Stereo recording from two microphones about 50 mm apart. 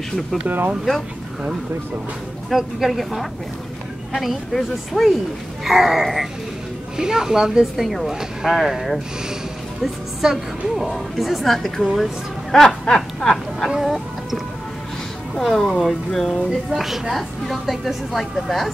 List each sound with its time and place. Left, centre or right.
0.5 s speech: right
2.5 s a woman's voice: centre
10.9 s a woman's voice: centre
12.4 s speech: centre
13.7 s speech: centre
15.3 s speech: centre
16.3 s a woman's voice: centre